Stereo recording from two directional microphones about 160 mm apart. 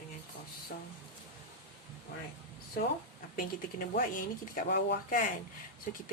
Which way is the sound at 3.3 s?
65° left (ahead or behind).